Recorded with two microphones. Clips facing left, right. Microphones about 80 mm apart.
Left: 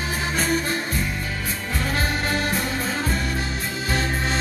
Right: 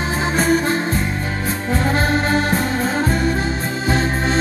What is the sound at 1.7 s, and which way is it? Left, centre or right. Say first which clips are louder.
Music: right 8 dB; right.